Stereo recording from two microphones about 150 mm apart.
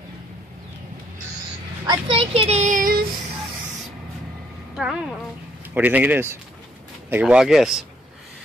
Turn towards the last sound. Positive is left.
turn(degrees=0)  # may be behind; listen again after turning